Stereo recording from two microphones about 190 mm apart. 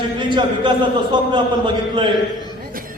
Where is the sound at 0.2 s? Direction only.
25° right (ahead or behind).